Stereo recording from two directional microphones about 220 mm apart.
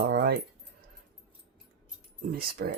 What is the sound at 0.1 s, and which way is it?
Keys jangling, 45° right (ahead or behind).